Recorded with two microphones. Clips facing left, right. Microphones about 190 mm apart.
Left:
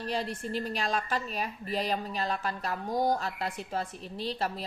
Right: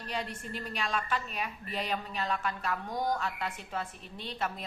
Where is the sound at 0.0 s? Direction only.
35° left (ahead or behind).